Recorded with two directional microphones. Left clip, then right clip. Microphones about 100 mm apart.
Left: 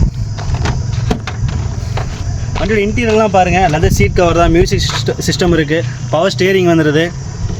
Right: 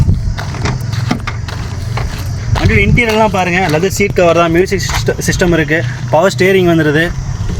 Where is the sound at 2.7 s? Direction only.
45° left (ahead or behind).